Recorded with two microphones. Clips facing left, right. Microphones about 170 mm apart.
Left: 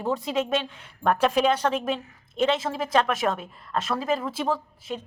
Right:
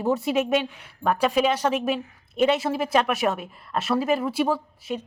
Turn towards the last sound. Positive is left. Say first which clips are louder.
# right 3 dB
turn(degrees=-10)  # may be behind; listen again after turning